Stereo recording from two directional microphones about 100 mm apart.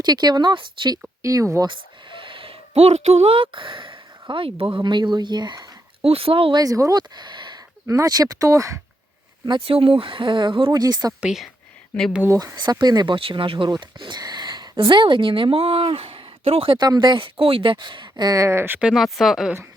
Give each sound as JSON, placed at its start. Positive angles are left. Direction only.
{"t": 0.0, "sound": "speech", "side_deg": -45}
{"t": 1.2, "sound": "speech", "side_deg": -30}
{"t": 1.6, "sound": "speech", "side_deg": -55}
{"t": 6.0, "sound": "speech", "side_deg": -75}
{"t": 6.6, "sound": "speech", "side_deg": -35}
{"t": 7.2, "sound": "a sound", "side_deg": -50}
{"t": 7.9, "sound": "speech", "side_deg": -35}
{"t": 9.6, "sound": "speech", "side_deg": -70}
{"t": 10.7, "sound": "speech", "side_deg": -40}
{"t": 11.2, "sound": "speech", "side_deg": -5}
{"t": 12.8, "sound": "speech", "side_deg": -45}
{"t": 13.1, "sound": "speech", "side_deg": -60}
{"t": 16.8, "sound": "speech", "side_deg": -45}
{"t": 18.8, "sound": "speech", "side_deg": -5}